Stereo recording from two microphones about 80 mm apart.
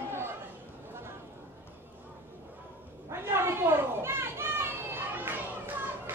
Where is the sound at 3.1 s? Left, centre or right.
Right.